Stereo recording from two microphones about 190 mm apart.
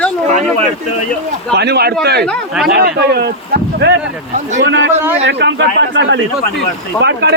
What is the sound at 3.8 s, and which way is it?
A man's voice, 65° right (ahead or behind).